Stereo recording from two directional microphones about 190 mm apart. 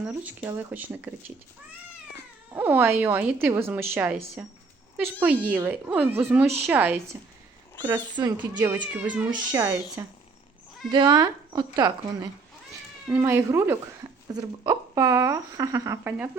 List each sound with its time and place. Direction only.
0.0 s a woman's voice: 10° right (ahead or behind)
2.6 s a woman's voice: 10° right (ahead or behind)
5.2 s a woman's voice: 10° right (ahead or behind)
9.3 s speech: 20° right (ahead or behind)
10.9 s a woman's voice: 20° right (ahead or behind)